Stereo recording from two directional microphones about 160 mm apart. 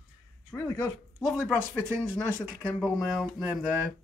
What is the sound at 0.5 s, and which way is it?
Speech, 15° left (ahead or behind).